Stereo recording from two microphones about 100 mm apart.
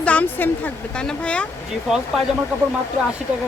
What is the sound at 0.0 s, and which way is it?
A woman's voice, 15° left (ahead or behind).